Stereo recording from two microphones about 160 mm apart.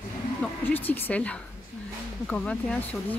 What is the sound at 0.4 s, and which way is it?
A woman's voice, 10° left (ahead or behind).